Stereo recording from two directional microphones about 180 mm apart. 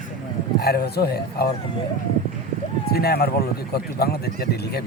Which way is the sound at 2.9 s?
60° left (ahead or behind).